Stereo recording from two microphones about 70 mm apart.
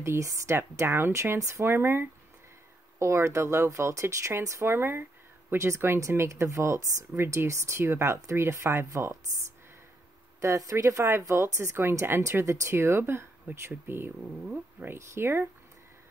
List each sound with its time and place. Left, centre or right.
0.0 s speech: right
0.6 s speech: right
10.4 s speech: right
14.5 s speech: right
15.0 s speech: right